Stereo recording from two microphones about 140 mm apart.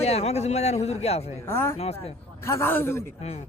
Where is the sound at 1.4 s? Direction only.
15° left (ahead or behind).